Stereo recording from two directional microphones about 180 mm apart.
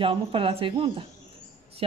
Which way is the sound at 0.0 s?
30° right (ahead or behind).